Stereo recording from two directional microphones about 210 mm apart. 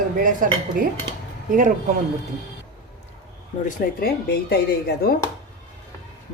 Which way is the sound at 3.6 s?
45° left (ahead or behind).